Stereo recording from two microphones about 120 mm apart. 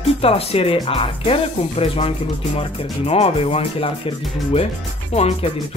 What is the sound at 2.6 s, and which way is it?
Music, 60° left (ahead or behind).